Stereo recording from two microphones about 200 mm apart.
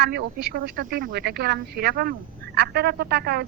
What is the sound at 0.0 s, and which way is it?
Speech, 55° right (ahead or behind).